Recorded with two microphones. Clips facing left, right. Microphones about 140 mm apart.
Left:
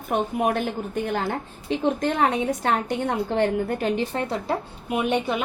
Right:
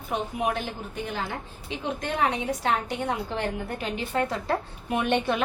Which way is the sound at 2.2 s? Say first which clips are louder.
Left 4 dB; 45° left (ahead or behind).